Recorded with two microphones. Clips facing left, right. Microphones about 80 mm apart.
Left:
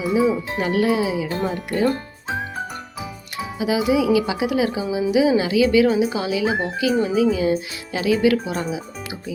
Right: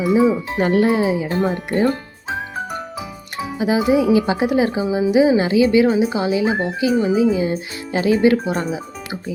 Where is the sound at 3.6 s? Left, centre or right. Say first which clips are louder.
Right 3 dB; right.